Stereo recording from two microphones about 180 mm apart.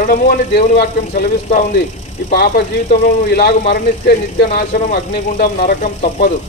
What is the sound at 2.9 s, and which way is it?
Speech, 50° left (ahead or behind).